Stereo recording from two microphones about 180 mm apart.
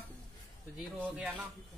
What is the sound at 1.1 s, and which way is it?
Speech, 10° right (ahead or behind).